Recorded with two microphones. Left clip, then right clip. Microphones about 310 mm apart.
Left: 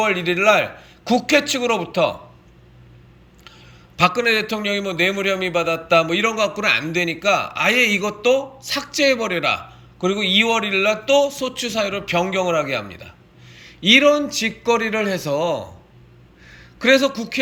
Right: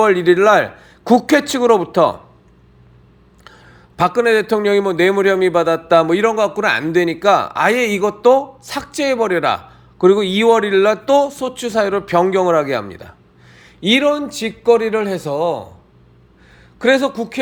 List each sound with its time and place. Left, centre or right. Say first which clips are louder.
0.0 s a man's voice: right 6 dB; right
3.4 s a man's voice: right 3 dB; centre
13.7 s a man's voice: left 1 dB; centre